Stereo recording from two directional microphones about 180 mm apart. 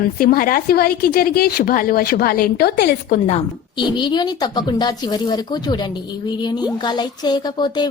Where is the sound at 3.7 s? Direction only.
25° left (ahead or behind).